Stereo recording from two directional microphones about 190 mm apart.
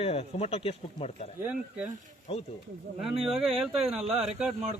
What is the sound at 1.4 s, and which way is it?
Speech, 10° right (ahead or behind).